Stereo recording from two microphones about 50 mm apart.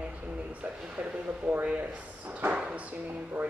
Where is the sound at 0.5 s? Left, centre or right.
Right.